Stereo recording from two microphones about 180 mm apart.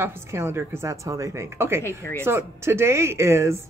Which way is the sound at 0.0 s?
15° right (ahead or behind).